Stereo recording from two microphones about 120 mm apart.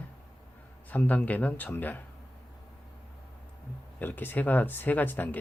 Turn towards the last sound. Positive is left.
turn(degrees=15)  # may be behind; listen again after turning